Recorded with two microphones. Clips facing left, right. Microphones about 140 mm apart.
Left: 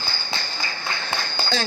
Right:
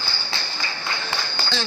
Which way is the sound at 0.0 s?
45° left (ahead or behind).